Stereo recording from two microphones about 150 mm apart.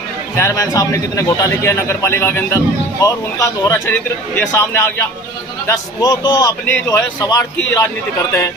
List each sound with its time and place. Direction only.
0.3 s a man's voice: 20° left (ahead or behind)